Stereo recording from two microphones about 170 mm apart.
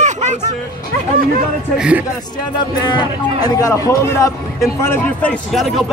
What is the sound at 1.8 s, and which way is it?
Speech, 5° right (ahead or behind).